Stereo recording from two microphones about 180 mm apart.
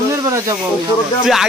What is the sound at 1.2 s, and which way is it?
Speech, centre (ahead or behind).